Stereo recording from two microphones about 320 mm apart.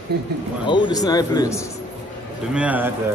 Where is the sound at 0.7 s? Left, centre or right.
Centre.